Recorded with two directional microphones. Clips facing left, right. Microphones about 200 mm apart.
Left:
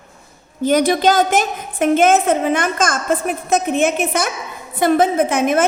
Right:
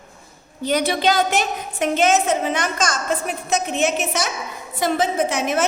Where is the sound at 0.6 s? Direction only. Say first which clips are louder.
Left 5 dB; 50° left (ahead or behind).